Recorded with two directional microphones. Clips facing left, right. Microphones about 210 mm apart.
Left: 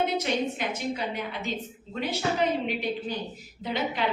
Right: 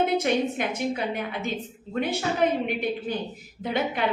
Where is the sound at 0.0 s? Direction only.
50° right (ahead or behind).